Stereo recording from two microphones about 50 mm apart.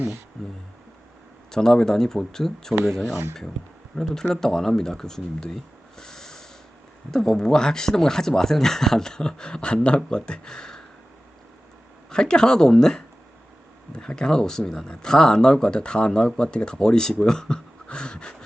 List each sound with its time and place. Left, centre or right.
1.5 s speech: centre
3.9 s speech: centre
12.1 s speech: centre